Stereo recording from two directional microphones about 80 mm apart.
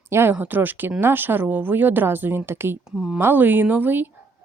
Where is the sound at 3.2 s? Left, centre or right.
Right.